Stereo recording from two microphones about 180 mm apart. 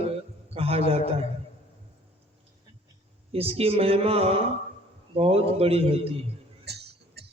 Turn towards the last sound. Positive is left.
turn(degrees=-65)  # may be behind; listen again after turning